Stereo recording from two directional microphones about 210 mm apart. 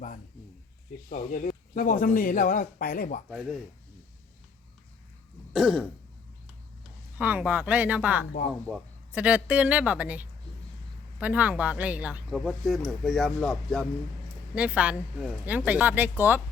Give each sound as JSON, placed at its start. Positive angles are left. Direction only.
{"t": 1.1, "sound": "speech", "side_deg": 40}
{"t": 5.5, "sound": "speech", "side_deg": -5}
{"t": 7.2, "sound": "speech", "side_deg": -5}